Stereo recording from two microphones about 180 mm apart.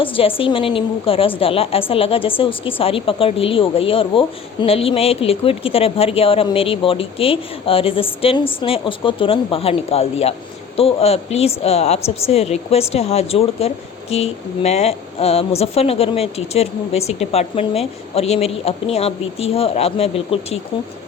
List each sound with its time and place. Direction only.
0.0 s speech: 30° left (ahead or behind)